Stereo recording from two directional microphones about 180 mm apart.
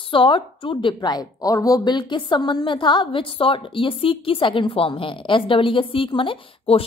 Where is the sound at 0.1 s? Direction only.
30° left (ahead or behind).